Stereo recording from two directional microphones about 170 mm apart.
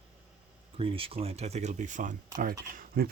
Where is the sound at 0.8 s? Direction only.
35° right (ahead or behind).